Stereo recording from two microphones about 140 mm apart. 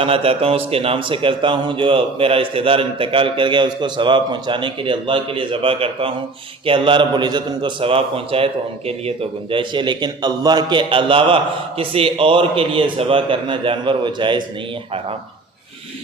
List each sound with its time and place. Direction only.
0.0 s a man's voice: 40° right (ahead or behind)